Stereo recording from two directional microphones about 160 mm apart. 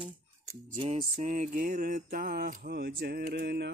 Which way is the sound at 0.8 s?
35° right (ahead or behind).